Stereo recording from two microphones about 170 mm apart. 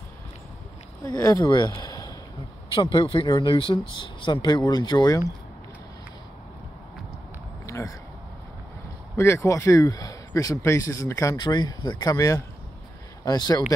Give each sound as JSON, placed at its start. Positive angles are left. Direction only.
{"t": 1.1, "sound": "speech", "side_deg": 20}
{"t": 7.6, "sound": "a sound", "side_deg": 20}
{"t": 9.1, "sound": "speech", "side_deg": 15}